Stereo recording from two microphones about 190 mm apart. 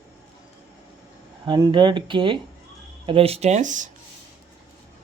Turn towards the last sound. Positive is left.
turn(degrees=-40)  # may be behind; listen again after turning